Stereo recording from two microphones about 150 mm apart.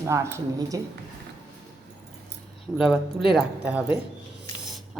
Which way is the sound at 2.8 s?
5° right (ahead or behind).